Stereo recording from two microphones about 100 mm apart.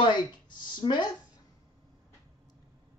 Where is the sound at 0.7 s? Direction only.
50° left (ahead or behind).